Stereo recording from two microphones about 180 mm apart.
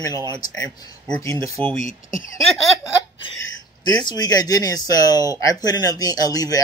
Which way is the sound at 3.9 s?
25° left (ahead or behind).